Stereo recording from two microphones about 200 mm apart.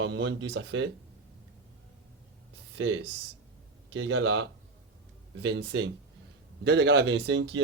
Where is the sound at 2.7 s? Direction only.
70° right (ahead or behind).